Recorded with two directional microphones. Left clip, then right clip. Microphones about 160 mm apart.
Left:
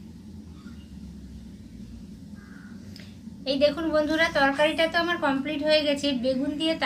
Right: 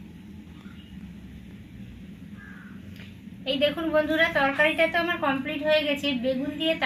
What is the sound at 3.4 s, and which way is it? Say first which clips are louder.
A woman's voice: left 2 dB; 10° left (ahead or behind).